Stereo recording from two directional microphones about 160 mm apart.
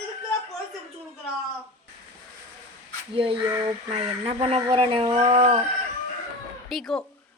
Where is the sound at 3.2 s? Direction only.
35° right (ahead or behind).